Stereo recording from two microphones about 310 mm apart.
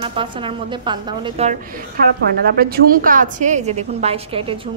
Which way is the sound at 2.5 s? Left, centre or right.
Right.